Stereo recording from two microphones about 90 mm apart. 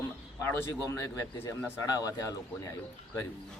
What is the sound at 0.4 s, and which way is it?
A man's voice, 30° left (ahead or behind).